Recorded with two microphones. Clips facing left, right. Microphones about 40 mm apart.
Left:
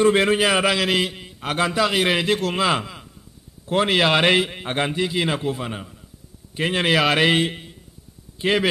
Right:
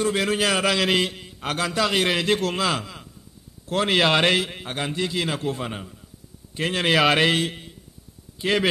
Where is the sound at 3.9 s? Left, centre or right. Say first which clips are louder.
Left 1 dB; centre.